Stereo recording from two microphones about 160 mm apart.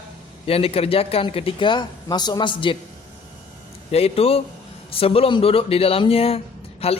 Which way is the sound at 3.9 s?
40° left (ahead or behind).